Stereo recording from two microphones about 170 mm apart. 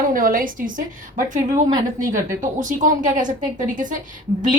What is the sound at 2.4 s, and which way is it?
Speech, 50° right (ahead or behind).